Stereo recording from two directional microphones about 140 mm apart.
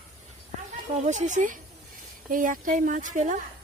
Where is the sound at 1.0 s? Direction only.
60° right (ahead or behind).